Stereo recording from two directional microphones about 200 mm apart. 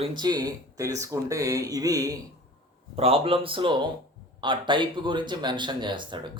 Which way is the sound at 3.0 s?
30° right (ahead or behind).